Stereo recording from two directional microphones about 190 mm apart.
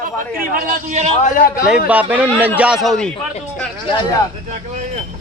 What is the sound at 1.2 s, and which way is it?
Speech, 50° left (ahead or behind).